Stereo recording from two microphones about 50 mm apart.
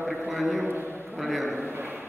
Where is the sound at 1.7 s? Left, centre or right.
Right.